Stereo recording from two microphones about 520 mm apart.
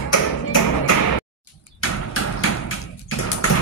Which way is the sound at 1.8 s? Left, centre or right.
Left.